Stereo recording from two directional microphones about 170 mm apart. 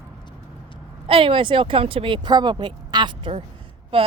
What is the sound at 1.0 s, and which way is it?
A woman's voice, 30° right (ahead or behind).